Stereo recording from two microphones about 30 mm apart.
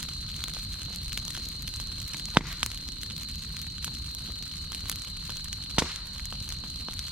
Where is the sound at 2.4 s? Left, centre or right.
Right.